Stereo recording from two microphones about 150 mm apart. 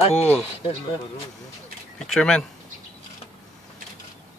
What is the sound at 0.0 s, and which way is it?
Speech, 45° left (ahead or behind).